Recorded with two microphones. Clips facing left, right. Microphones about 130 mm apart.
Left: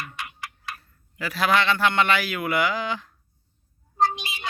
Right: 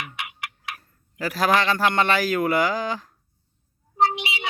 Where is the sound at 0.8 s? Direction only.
40° right (ahead or behind).